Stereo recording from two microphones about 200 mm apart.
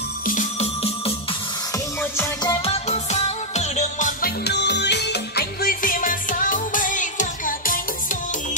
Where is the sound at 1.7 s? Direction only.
15° left (ahead or behind); by 4.3 s 35° left (ahead or behind).